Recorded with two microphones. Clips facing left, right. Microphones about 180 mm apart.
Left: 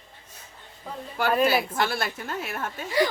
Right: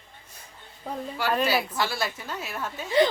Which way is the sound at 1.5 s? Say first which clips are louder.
Left 2 dB; 50° left (ahead or behind).